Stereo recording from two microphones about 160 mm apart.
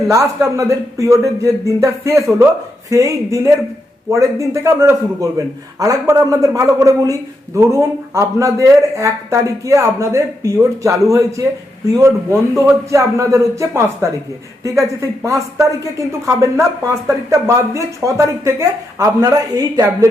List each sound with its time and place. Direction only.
0.1 s speech: 20° right (ahead or behind)